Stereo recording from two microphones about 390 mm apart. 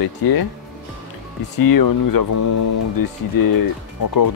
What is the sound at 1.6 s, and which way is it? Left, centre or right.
Speech, left.